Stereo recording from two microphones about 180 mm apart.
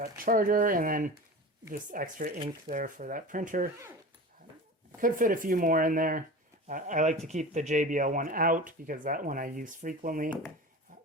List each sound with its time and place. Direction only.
0.0 s speech: 50° right (ahead or behind)
4.9 s speech: 50° right (ahead or behind)